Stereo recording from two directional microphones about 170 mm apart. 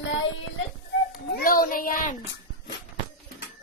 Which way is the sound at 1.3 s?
60° left (ahead or behind).